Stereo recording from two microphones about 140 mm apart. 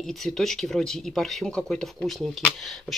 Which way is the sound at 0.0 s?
Centre (ahead or behind).